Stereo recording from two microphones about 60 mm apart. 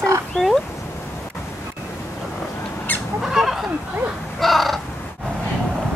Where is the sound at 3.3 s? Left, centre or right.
Centre.